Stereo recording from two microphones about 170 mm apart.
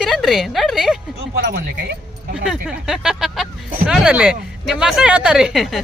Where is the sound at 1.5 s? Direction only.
60° right (ahead or behind).